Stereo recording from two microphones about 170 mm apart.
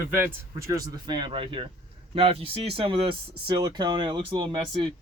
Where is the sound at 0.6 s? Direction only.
25° right (ahead or behind).